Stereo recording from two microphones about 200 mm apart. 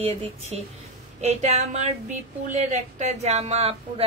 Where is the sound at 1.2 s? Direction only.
35° right (ahead or behind).